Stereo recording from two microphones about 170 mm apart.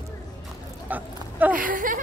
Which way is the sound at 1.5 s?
55° right (ahead or behind).